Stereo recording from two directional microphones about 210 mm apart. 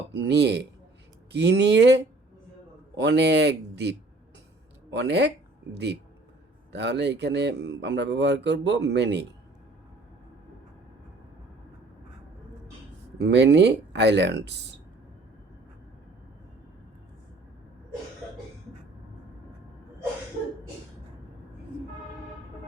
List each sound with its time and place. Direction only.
0.1 s speech: 55° right (ahead or behind)
13.2 s speech: 55° right (ahead or behind)